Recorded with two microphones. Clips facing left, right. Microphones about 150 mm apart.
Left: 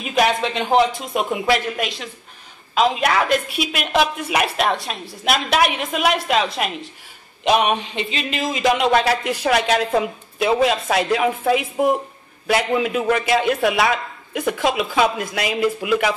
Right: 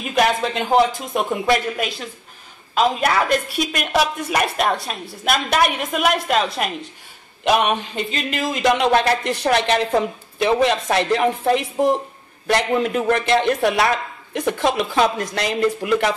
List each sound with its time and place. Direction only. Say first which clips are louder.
0.0 s a woman's voice: even; centre (ahead or behind)